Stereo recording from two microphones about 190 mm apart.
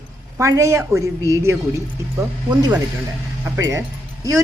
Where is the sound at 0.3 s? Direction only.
15° right (ahead or behind).